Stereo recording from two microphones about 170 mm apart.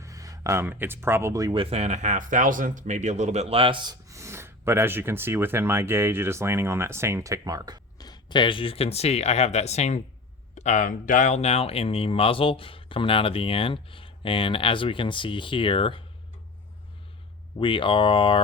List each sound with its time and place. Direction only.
0.0 s speech: 20° right (ahead or behind)
1.5 s speech: 40° right (ahead or behind); by 7.8 s 25° right (ahead or behind)
7.9 s speech: 25° left (ahead or behind)
17.6 s speech: 30° left (ahead or behind)